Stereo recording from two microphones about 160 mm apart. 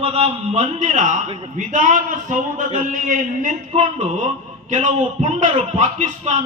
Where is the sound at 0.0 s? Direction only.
40° right (ahead or behind).